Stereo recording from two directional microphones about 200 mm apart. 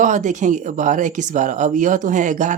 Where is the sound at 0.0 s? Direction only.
40° right (ahead or behind).